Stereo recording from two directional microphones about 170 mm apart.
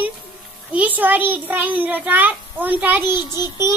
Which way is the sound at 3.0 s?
25° left (ahead or behind).